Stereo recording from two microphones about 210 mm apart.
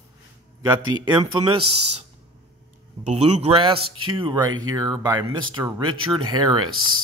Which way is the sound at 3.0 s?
30° right (ahead or behind).